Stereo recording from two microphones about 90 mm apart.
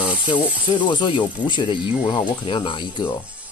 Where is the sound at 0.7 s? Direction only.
65° left (ahead or behind).